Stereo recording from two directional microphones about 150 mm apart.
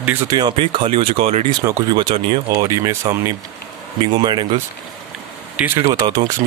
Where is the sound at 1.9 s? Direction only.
30° right (ahead or behind).